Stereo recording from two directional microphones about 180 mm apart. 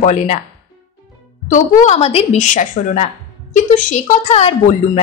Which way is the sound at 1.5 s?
40° left (ahead or behind).